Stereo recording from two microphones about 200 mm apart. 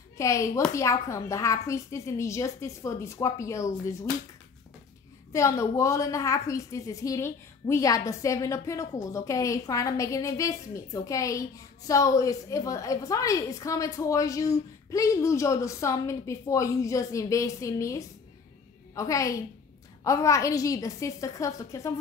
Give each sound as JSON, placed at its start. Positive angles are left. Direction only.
{"t": 0.2, "sound": "a woman's voice", "side_deg": 15}
{"t": 5.3, "sound": "a woman's voice", "side_deg": 15}